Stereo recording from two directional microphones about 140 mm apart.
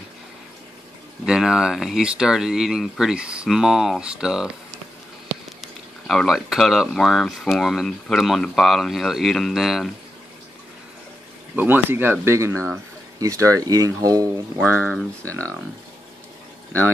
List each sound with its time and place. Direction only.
1.2 s speech: 5° right (ahead or behind)
6.0 s speech: centre (ahead or behind)
11.5 s speech: 15° right (ahead or behind)